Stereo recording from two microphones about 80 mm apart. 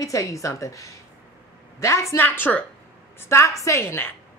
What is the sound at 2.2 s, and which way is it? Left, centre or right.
Speech, left.